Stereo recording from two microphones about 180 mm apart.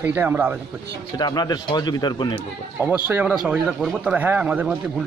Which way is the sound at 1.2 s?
20° left (ahead or behind).